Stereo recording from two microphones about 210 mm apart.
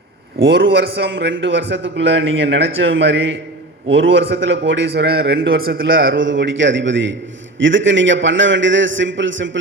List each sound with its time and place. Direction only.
0.4 s a man's voice: 50° right (ahead or behind)
6.1 s a man's voice: 65° right (ahead or behind)